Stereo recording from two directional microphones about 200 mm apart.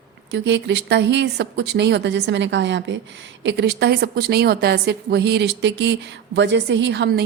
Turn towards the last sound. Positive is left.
turn(degrees=-60)  # may be behind; listen again after turning